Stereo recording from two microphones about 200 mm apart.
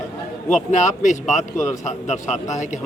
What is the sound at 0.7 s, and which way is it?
Speech, 40° left (ahead or behind).